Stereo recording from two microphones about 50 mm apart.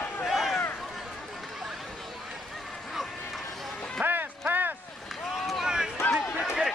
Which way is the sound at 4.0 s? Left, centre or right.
Right.